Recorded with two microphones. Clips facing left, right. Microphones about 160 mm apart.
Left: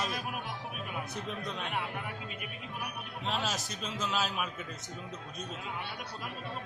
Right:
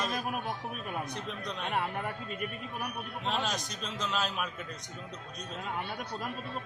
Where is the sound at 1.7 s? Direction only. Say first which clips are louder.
Right 8 dB; 45° right (ahead or behind).